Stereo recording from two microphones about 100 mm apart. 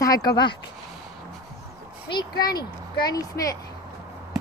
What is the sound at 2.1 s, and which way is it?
Speech, 45° left (ahead or behind).